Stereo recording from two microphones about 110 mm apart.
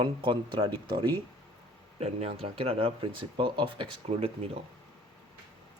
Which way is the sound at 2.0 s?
70° right (ahead or behind).